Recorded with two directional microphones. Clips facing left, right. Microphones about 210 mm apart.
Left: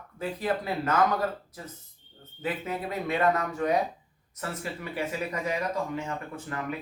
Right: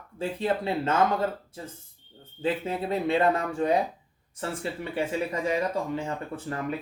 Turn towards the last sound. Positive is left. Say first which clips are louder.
# right 2 dB
turn(degrees=-30)  # may be behind; listen again after turning